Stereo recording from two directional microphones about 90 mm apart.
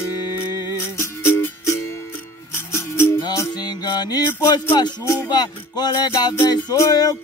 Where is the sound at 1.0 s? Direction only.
30° left (ahead or behind).